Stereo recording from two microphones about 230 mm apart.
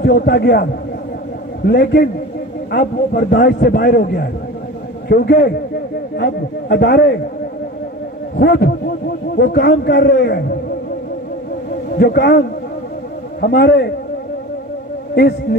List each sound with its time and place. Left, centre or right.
0.0 s a man's voice: left
1.7 s a man's voice: left
8.4 s a man's voice: left
11.9 s a man's voice: left